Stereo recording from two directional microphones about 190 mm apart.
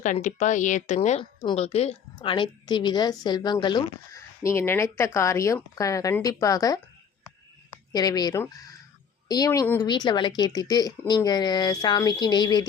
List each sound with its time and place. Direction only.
0.0 s speech: 40° left (ahead or behind); by 6.7 s 20° left (ahead or behind)
7.9 s speech: 20° left (ahead or behind)
9.8 s speech: 25° left (ahead or behind)